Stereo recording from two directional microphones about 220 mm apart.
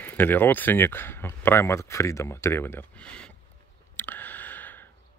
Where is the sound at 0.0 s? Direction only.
10° left (ahead or behind).